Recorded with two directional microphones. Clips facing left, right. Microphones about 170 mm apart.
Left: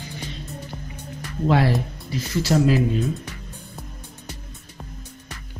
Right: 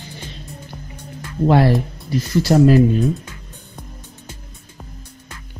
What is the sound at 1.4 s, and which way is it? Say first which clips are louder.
Speech: right 5 dB; 45° right (ahead or behind).